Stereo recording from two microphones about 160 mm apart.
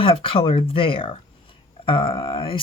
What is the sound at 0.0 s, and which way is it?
Speech, 35° left (ahead or behind).